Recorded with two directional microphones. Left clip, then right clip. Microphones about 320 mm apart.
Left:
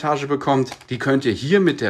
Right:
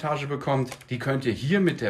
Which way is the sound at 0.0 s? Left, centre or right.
Centre.